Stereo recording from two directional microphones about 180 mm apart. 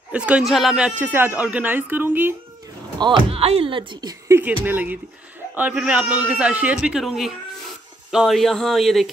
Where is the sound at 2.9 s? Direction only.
25° right (ahead or behind).